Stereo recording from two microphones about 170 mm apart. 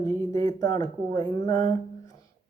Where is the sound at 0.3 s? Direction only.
20° left (ahead or behind).